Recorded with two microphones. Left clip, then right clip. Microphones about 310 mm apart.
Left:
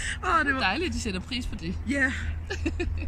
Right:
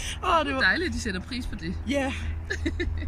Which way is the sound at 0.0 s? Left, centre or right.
Centre.